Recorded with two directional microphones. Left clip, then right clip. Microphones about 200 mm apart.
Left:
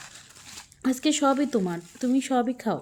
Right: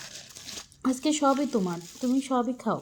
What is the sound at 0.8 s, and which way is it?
Speech, 25° left (ahead or behind).